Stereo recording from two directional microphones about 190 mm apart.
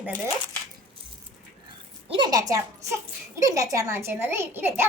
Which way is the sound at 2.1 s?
25° right (ahead or behind).